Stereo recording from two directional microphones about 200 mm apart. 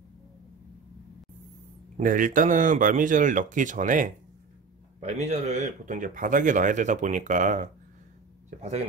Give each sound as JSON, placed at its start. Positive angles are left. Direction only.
{"t": 2.0, "sound": "speech", "side_deg": -40}